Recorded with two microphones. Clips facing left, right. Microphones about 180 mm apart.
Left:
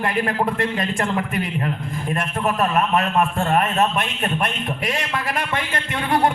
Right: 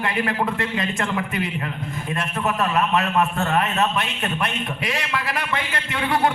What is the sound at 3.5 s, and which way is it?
A man's voice, 50° left (ahead or behind).